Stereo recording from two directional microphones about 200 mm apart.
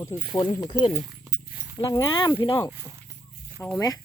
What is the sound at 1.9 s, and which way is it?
Speech, 20° left (ahead or behind).